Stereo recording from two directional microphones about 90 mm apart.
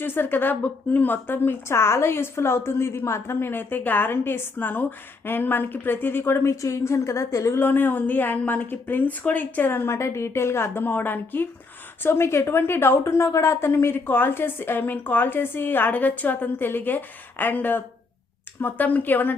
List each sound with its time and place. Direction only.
0.0 s a woman's voice: 25° left (ahead or behind)